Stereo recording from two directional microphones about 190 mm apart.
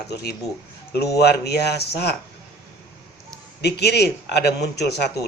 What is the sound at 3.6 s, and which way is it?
Speech, 60° left (ahead or behind).